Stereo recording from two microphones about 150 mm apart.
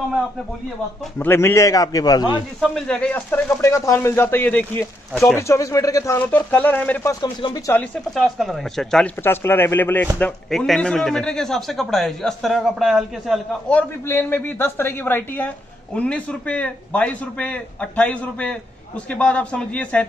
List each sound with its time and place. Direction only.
1.2 s a man's voice: 15° left (ahead or behind)
2.6 s speech: 5° left (ahead or behind)
7.1 s a man's voice: 25° left (ahead or behind)
7.7 s a man's voice: 5° left (ahead or behind)
9.2 s a man's voice: 15° left (ahead or behind); by 13.4 s centre (ahead or behind)
13.7 s speech: 15° left (ahead or behind)